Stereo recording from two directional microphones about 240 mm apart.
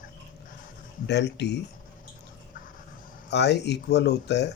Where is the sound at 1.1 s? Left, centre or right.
Left.